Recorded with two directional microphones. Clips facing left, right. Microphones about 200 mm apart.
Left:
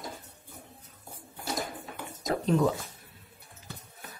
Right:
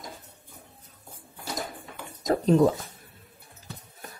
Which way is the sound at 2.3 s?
40° right (ahead or behind).